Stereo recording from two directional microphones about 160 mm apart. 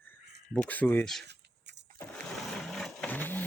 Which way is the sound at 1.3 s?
90° right.